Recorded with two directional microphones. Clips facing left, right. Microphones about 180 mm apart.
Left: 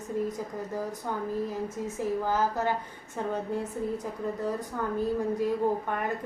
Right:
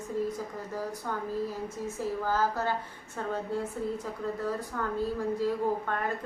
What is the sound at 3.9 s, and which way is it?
A woman's voice, 20° left (ahead or behind).